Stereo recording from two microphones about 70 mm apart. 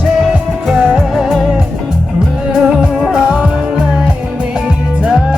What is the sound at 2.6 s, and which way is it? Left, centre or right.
Music, centre.